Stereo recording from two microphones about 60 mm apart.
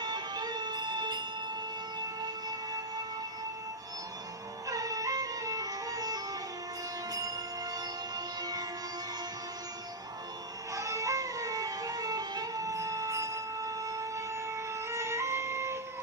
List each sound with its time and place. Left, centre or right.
4.6 s music: right
10.7 s music: right